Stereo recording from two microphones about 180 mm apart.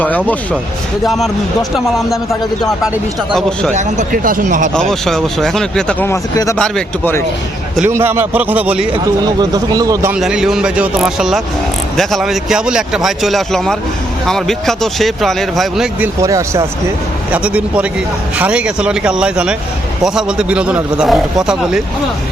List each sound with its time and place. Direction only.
1.0 s speech: centre (ahead or behind)
3.8 s speech: 45° right (ahead or behind)
4.7 s speech: 5° left (ahead or behind)
6.6 s a man's voice: 5° left (ahead or behind)
7.9 s speech: 15° right (ahead or behind)
8.9 s speech: 25° right (ahead or behind)
10.2 s speech: 5° right (ahead or behind)
16.2 s speech: 20° right (ahead or behind)
17.3 s speech: 5° right (ahead or behind)